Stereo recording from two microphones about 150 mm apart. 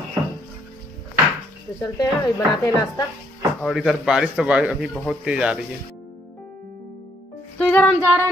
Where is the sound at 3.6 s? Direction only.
Centre (ahead or behind).